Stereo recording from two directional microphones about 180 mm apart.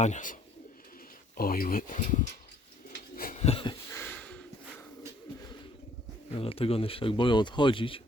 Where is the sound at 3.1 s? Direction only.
55° left (ahead or behind).